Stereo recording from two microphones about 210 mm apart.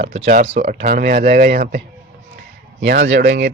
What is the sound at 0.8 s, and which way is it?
Speech, 45° right (ahead or behind).